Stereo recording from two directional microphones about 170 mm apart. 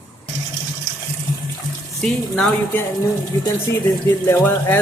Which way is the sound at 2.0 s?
5° left (ahead or behind).